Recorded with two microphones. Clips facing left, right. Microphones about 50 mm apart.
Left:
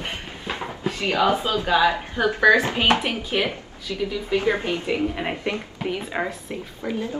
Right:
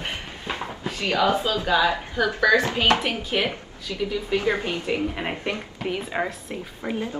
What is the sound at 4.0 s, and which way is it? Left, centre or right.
Speech, centre.